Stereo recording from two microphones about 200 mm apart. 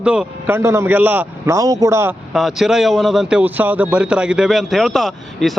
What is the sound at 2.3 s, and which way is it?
Speech, centre (ahead or behind).